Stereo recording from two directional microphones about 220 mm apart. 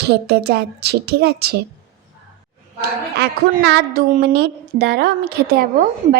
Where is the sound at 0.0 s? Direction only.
45° right (ahead or behind).